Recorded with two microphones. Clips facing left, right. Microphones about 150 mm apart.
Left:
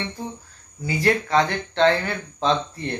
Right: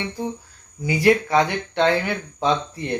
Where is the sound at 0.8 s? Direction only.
15° right (ahead or behind).